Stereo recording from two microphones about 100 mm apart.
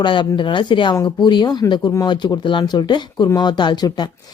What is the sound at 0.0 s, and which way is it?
Speech, 50° left (ahead or behind).